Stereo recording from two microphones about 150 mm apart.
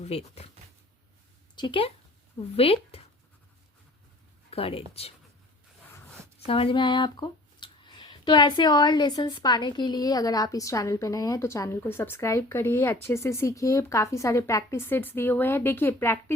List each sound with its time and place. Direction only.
0.0 s speech: 45° left (ahead or behind)
1.5 s speech: 35° left (ahead or behind)
4.5 s speech: 40° left (ahead or behind)
5.8 s a sound: 10° left (ahead or behind)
6.5 s speech: 35° left (ahead or behind); by 16.1 s 15° left (ahead or behind)